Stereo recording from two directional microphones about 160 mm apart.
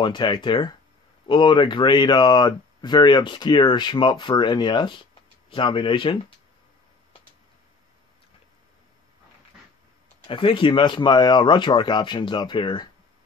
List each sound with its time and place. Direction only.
0.0 s speech: 30° left (ahead or behind)
10.2 s speech: 35° left (ahead or behind)